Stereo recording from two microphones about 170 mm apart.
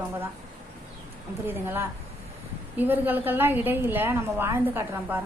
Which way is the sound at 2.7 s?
10° right (ahead or behind).